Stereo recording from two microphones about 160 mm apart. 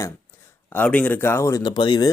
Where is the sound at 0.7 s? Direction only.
10° left (ahead or behind); by 2.1 s 25° left (ahead or behind).